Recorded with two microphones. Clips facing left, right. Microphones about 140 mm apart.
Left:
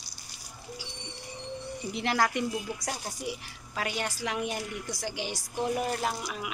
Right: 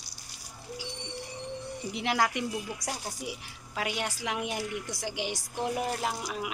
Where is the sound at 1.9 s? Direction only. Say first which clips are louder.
Left 1 dB; 15° right (ahead or behind).